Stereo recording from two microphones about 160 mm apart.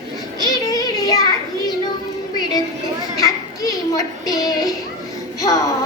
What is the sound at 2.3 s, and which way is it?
Music, 25° left (ahead or behind).